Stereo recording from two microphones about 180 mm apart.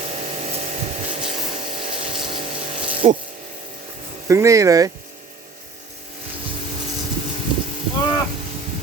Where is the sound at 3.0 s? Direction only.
40° right (ahead or behind).